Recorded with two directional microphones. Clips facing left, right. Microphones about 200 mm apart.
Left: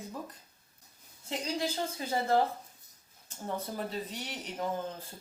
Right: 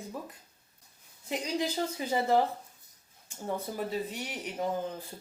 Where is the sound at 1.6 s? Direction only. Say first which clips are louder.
Right 4 dB; 15° right (ahead or behind).